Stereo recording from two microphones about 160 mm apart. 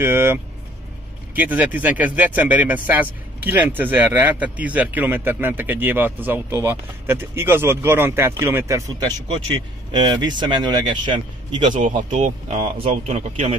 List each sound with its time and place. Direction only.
0.0 s speech: 15° right (ahead or behind)
11.7 s speech: 55° right (ahead or behind)